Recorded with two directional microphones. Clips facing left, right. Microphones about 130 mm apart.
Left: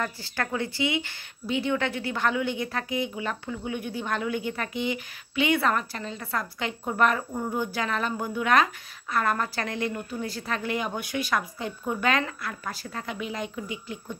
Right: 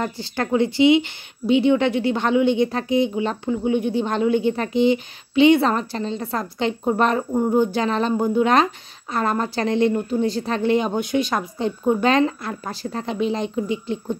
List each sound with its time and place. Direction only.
0.0 s a woman's voice: 25° right (ahead or behind)